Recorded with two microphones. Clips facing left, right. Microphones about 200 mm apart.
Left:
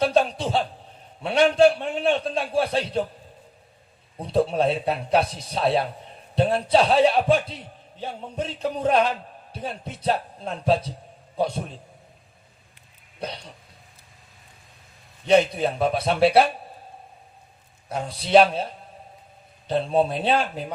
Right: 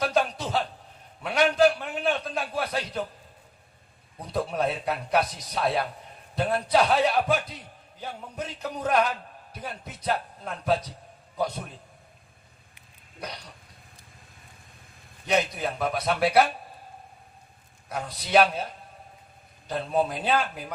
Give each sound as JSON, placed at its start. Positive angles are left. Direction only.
{"t": 0.0, "sound": "a sound", "side_deg": 30}
{"t": 1.2, "sound": "a man's voice", "side_deg": 30}
{"t": 4.2, "sound": "a man's voice", "side_deg": 30}
{"t": 13.1, "sound": "speech", "side_deg": 30}
{"t": 15.3, "sound": "a man's voice", "side_deg": 30}
{"t": 17.8, "sound": "a man's voice", "side_deg": 30}